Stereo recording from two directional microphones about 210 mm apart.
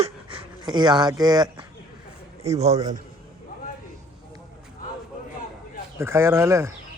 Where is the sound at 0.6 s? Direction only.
20° right (ahead or behind).